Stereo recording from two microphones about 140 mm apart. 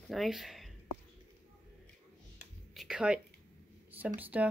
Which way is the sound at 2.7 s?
5° right (ahead or behind).